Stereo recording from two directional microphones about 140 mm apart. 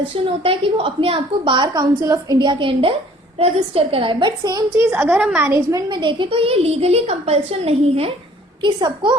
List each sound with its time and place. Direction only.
0.4 s a woman's voice: 40° right (ahead or behind)
4.8 s a woman's voice: 15° right (ahead or behind)
5.5 s a woman's voice: 20° right (ahead or behind)
5.9 s a woman's voice: 35° right (ahead or behind)
8.6 s a woman's voice: 35° right (ahead or behind)